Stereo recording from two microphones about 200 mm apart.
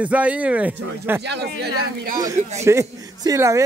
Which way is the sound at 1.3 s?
55° right (ahead or behind).